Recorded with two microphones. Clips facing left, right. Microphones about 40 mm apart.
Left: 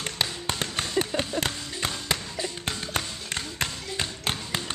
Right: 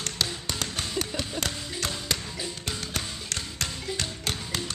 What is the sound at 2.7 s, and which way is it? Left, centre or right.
Music, left.